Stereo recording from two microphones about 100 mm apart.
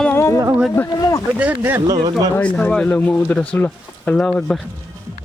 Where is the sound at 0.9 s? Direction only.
40° left (ahead or behind).